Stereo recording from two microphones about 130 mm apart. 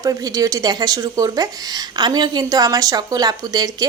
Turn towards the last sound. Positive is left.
turn(degrees=-30)  # may be behind; listen again after turning